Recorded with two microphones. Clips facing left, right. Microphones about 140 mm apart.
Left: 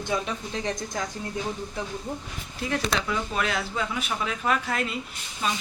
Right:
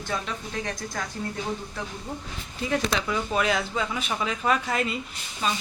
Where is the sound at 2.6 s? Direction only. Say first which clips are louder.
Right 1 dB; centre (ahead or behind).